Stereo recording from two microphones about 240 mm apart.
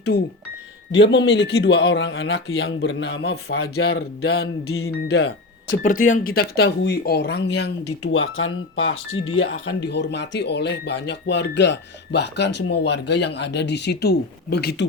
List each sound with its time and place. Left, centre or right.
0.0 s speech: left
4.7 s speech: left
5.0 s speech: left